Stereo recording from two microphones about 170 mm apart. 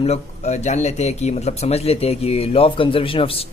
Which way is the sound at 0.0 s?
40° left (ahead or behind).